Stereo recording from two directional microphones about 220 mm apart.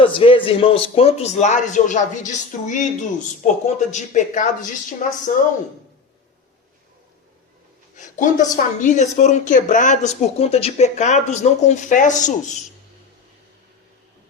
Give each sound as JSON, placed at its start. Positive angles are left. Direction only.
{"t": 0.0, "sound": "a man's voice", "side_deg": 25}
{"t": 7.9, "sound": "speech", "side_deg": 35}